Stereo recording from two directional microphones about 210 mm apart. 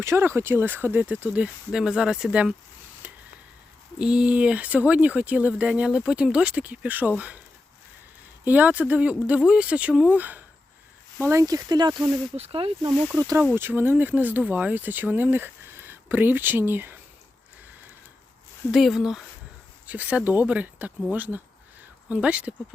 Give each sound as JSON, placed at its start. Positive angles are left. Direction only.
{"t": 0.0, "sound": "speech", "side_deg": -10}
{"t": 3.9, "sound": "speech", "side_deg": -5}
{"t": 8.4, "sound": "speech", "side_deg": -5}
{"t": 18.7, "sound": "speech", "side_deg": 0}